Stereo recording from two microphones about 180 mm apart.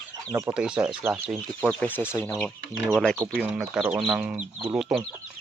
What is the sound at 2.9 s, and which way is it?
Speech, 5° left (ahead or behind).